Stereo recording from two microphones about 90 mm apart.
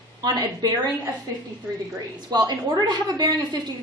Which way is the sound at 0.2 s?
45° right (ahead or behind).